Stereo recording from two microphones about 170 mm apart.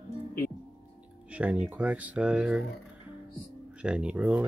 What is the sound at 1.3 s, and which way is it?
Speech, 10° right (ahead or behind).